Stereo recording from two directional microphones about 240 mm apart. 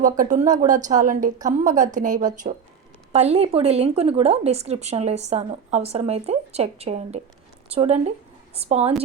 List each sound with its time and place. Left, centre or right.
0.0 s speech: right